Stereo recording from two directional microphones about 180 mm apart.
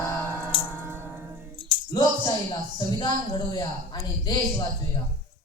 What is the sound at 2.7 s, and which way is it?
Speech, 25° left (ahead or behind).